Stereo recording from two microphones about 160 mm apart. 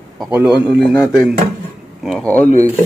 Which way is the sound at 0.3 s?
10° right (ahead or behind).